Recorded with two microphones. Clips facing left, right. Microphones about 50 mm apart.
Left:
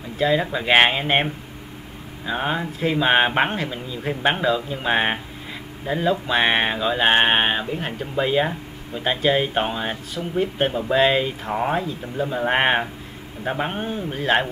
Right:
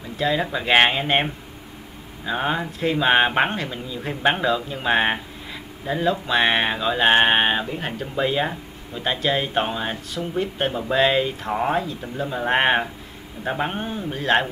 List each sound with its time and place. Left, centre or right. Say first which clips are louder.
0.2 s speech: left 2 dB; centre